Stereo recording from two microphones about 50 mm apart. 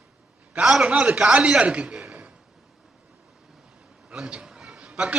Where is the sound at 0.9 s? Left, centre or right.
Right.